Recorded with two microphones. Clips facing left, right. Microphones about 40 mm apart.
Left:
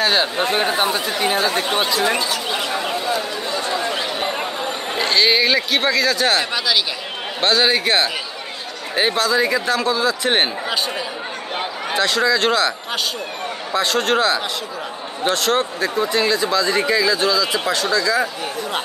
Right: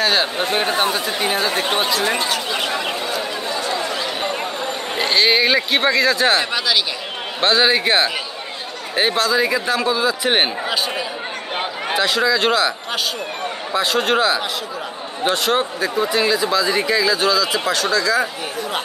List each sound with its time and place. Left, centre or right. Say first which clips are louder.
0.0 s speech: even; centre
4.9 s a man's voice: even; centre